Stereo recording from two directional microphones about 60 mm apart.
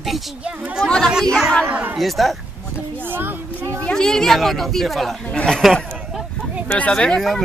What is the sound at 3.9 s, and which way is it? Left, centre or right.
Speech, centre.